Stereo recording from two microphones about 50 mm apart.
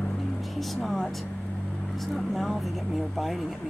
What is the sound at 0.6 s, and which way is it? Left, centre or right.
Speech, centre.